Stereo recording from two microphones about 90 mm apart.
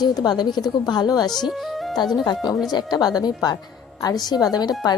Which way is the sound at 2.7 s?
50° left (ahead or behind).